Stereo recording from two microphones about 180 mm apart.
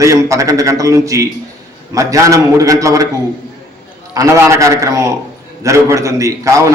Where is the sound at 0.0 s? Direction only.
15° right (ahead or behind).